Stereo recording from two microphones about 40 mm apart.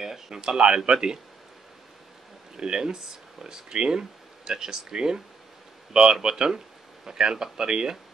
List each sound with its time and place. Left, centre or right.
0.0 s speech: centre
2.5 s speech: centre
6.2 s speech: centre